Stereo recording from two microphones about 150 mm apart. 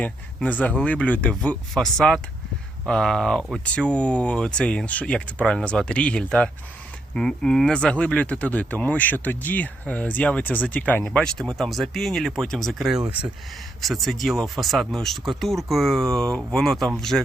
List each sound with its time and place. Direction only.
0.0 s speech: 10° left (ahead or behind)